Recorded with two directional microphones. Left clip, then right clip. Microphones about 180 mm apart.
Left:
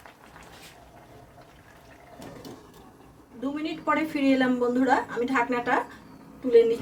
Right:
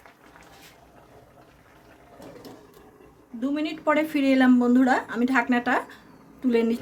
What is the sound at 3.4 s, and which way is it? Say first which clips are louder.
A woman's voice: right 4 dB; 70° right (ahead or behind).